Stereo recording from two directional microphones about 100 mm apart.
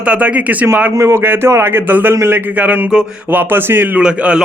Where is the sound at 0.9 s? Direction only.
30° right (ahead or behind).